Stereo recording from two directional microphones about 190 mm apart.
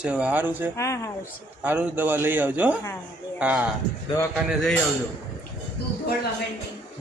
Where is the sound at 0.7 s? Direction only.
15° left (ahead or behind).